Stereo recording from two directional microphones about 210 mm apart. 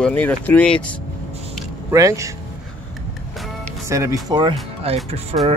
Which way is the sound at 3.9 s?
15° right (ahead or behind).